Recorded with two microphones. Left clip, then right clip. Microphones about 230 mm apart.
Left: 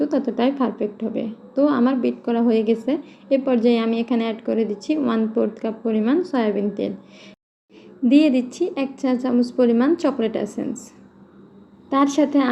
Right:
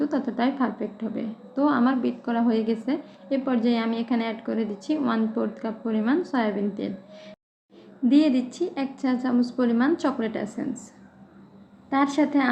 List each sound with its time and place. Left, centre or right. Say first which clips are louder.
0.0 s a woman's voice: left 5 dB; centre
8.0 s a woman's voice: left 4 dB; centre
11.9 s a woman's voice: left 4 dB; centre